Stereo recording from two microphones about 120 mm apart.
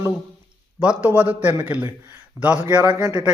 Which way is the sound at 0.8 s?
15° right (ahead or behind).